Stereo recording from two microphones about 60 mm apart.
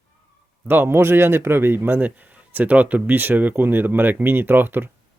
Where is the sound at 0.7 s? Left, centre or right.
Right.